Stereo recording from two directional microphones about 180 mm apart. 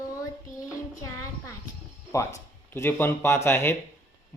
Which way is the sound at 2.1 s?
15° left (ahead or behind).